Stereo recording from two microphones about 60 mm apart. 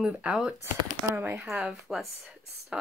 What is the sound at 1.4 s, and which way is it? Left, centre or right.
Speech, centre.